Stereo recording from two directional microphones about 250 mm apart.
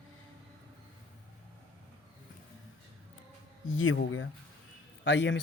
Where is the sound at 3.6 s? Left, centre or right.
Left.